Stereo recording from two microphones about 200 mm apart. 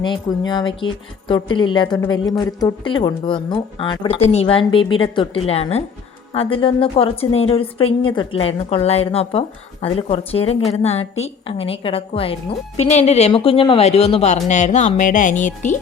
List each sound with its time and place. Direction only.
0.0 s a woman's voice: 25° left (ahead or behind); by 15.8 s 40° left (ahead or behind)